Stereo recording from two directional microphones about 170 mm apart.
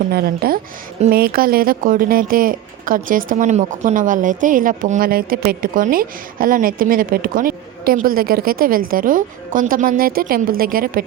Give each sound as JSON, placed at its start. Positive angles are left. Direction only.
{"t": 0.1, "sound": "speech", "side_deg": -65}